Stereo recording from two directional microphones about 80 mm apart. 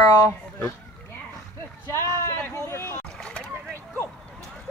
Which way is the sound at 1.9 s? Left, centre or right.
Left.